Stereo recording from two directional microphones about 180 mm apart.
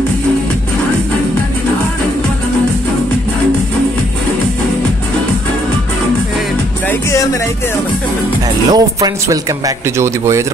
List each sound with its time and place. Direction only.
6.9 s music: 15° left (ahead or behind)
8.6 s speech: 20° right (ahead or behind)